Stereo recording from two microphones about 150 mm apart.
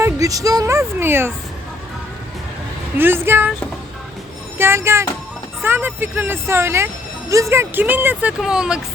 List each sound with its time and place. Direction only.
0.0 s speech: 25° right (ahead or behind)
3.0 s speech: 15° right (ahead or behind)
4.5 s speech: 15° right (ahead or behind)